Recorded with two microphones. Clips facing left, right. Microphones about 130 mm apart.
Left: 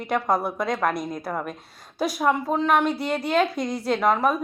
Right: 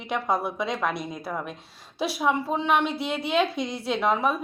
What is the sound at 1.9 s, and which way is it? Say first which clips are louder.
Speech: left 2 dB; centre (ahead or behind).